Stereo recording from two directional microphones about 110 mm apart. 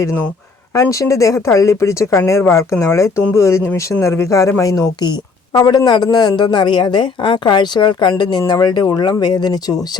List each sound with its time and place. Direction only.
0.7 s speech: 30° left (ahead or behind)